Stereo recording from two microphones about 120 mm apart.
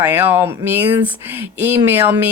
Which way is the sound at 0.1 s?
15° right (ahead or behind).